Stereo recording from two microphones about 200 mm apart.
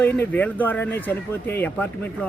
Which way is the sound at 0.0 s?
10° left (ahead or behind).